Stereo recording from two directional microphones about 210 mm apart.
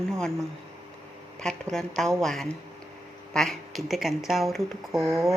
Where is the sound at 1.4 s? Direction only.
5° left (ahead or behind).